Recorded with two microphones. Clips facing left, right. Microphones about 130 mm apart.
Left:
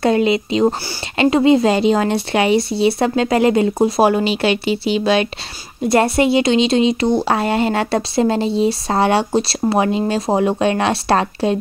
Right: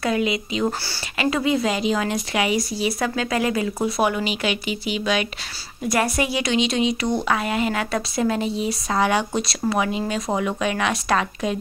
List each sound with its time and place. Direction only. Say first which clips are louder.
0.0 s speech: left 7 dB; 30° left (ahead or behind)